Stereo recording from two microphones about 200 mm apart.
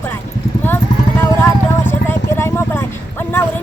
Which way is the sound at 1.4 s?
10° left (ahead or behind).